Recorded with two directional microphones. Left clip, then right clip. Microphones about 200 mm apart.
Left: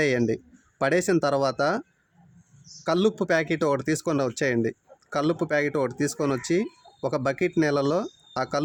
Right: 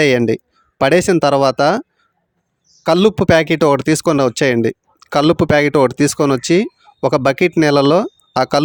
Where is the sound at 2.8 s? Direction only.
40° right (ahead or behind).